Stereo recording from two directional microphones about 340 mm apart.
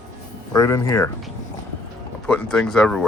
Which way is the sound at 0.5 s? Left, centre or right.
Centre.